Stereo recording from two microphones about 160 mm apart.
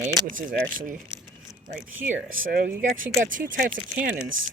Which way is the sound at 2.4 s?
60° right (ahead or behind).